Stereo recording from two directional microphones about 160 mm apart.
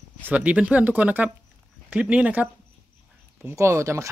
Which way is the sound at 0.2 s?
10° right (ahead or behind).